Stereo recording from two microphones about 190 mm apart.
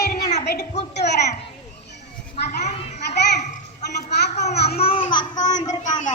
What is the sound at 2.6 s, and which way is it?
Children playing, 35° left (ahead or behind).